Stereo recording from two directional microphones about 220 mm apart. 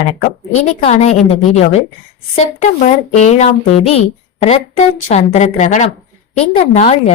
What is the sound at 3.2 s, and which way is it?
A woman's voice, 30° left (ahead or behind).